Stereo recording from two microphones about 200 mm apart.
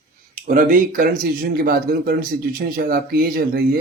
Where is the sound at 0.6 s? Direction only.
45° right (ahead or behind).